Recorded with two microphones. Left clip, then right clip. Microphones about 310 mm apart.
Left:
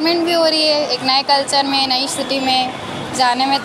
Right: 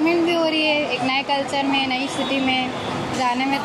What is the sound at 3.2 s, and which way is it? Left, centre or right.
Speech, left.